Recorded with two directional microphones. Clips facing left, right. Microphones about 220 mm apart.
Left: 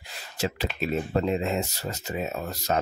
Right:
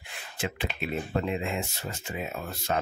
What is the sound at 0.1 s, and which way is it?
Speech, 40° left (ahead or behind).